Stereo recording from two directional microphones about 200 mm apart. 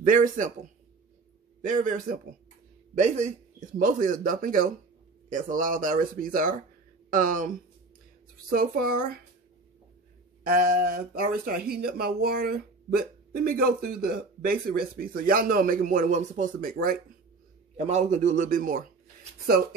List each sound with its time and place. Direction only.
0.0 s a man's voice: 40° right (ahead or behind)
1.6 s a man's voice: 40° right (ahead or behind)
10.4 s speech: 45° right (ahead or behind)
17.7 s a man's voice: 30° right (ahead or behind)